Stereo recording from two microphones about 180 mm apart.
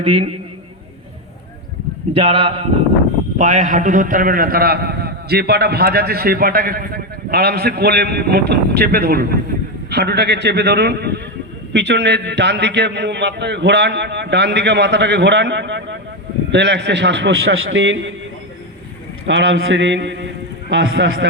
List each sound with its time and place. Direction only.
0.0 s speech: 35° right (ahead or behind)
2.1 s a man's voice: 30° right (ahead or behind); by 18.0 s 80° right
19.3 s a man's voice: 85° right